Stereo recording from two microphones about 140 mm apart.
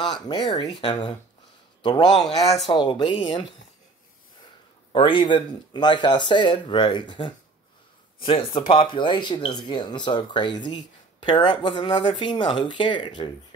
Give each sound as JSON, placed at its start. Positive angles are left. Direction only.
{"t": 0.0, "sound": "a man's voice", "side_deg": 35}
{"t": 4.9, "sound": "speech", "side_deg": 35}